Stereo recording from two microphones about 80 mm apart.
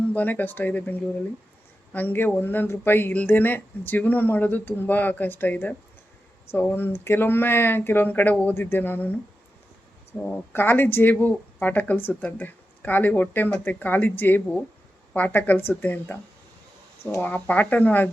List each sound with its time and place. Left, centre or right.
0.1 s speech: left
6.7 s speech: left
10.3 s speech: left
17.2 s speech: left